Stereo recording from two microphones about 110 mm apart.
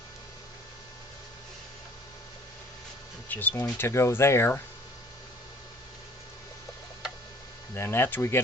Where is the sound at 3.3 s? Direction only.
15° left (ahead or behind).